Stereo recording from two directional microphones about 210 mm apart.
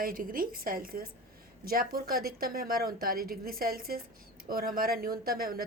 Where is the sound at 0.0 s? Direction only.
40° right (ahead or behind).